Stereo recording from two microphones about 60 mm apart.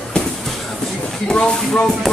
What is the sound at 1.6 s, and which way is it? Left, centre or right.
Speech, centre.